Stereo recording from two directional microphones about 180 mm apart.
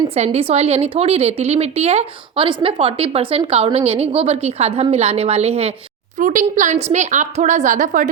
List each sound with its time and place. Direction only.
0.1 s a woman's voice: 35° right (ahead or behind)
6.1 s a woman's voice: 45° right (ahead or behind)